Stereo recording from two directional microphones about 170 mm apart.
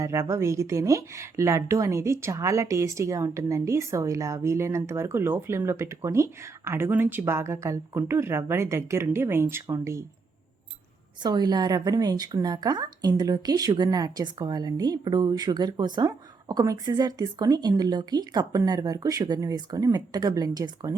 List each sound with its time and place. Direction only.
0.0 s speech: 15° right (ahead or behind)
11.2 s a woman's voice: 25° right (ahead or behind)